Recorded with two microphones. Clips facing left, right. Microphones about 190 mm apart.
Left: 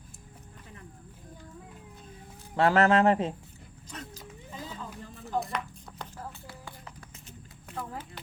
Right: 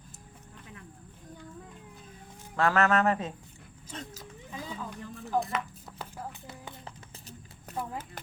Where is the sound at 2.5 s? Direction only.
30° left (ahead or behind).